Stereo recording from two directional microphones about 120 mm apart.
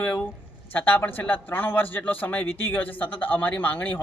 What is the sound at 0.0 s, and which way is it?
Speech, 10° left (ahead or behind).